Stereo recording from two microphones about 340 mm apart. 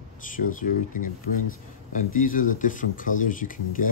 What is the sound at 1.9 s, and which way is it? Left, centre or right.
Speech, left.